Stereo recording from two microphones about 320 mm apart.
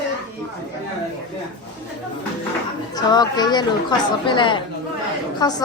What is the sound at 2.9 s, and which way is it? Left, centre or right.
A woman's voice, centre.